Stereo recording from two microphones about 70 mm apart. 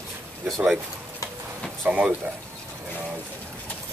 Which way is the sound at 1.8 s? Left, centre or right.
Right.